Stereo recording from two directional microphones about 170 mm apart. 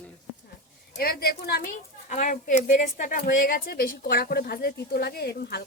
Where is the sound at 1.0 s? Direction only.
60° left (ahead or behind).